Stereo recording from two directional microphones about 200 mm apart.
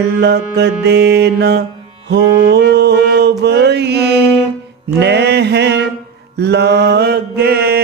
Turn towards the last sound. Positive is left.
turn(degrees=-50)  # may be behind; listen again after turning